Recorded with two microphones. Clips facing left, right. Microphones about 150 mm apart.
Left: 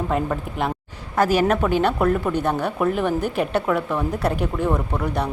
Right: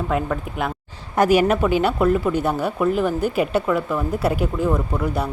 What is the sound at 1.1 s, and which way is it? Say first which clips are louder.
Speech: right 2 dB; 15° right (ahead or behind).